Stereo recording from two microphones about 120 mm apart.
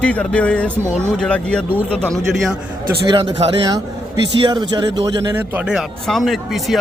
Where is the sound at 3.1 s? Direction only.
50° right (ahead or behind).